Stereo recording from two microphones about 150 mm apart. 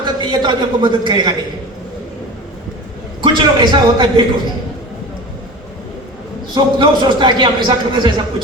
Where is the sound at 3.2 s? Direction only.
30° right (ahead or behind).